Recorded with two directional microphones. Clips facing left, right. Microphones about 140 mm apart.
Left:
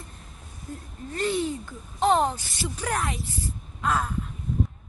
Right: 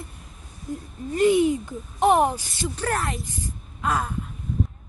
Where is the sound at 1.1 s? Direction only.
15° right (ahead or behind).